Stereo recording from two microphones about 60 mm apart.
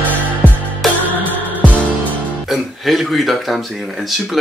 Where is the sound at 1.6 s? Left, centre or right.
Left.